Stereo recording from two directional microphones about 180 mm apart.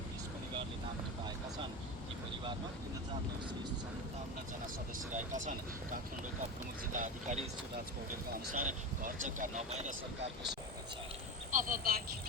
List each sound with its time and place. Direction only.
5.1 s speech: 45° right (ahead or behind)
8.5 s speech: 50° right (ahead or behind)
11.5 s speech: 50° right (ahead or behind)